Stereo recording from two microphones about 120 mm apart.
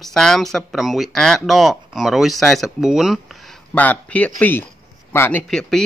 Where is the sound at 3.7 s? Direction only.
10° left (ahead or behind).